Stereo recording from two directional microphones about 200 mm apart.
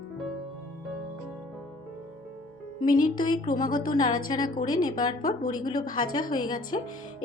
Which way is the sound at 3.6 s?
20° left (ahead or behind).